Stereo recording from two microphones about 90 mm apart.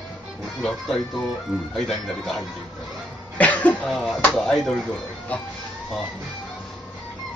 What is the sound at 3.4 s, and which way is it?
Cough, 15° left (ahead or behind).